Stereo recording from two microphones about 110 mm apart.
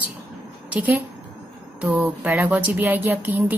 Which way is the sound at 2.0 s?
15° right (ahead or behind).